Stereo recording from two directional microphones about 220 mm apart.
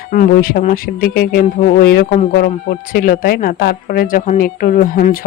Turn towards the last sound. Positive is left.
turn(degrees=40)  # may be behind; listen again after turning